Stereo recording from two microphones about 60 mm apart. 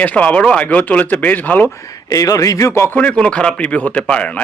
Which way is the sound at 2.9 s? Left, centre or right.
Left.